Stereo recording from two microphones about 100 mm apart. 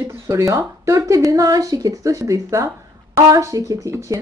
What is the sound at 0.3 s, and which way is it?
Speech, 30° right (ahead or behind).